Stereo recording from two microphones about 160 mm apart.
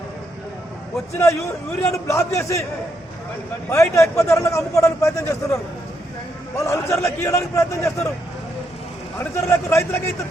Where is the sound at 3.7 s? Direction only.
20° left (ahead or behind).